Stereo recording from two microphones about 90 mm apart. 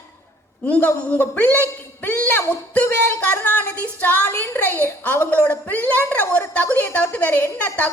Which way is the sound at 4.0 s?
20° left (ahead or behind).